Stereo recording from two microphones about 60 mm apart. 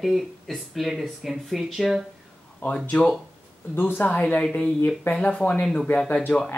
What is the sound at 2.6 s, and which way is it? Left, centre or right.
Speech, left.